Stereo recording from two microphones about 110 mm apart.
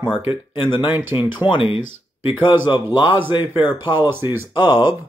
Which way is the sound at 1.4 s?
55° left (ahead or behind).